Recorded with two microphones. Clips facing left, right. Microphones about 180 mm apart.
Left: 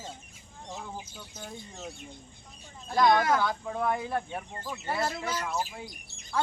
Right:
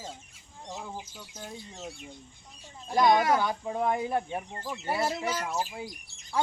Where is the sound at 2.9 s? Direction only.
15° right (ahead or behind).